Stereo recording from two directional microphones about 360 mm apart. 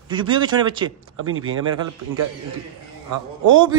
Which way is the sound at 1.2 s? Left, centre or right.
Right.